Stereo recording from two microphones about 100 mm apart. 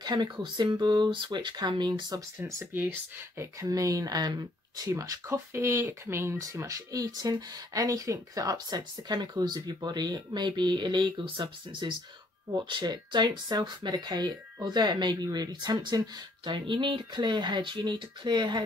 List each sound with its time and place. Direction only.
0.0 s speech: 45° right (ahead or behind)
2.6 s speech: 20° right (ahead or behind); by 18.6 s 50° right (ahead or behind)